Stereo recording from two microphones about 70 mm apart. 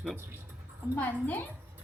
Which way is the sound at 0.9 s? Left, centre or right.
Left.